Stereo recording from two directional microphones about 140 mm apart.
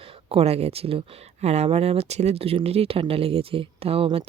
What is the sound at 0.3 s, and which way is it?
Speech, 45° right (ahead or behind).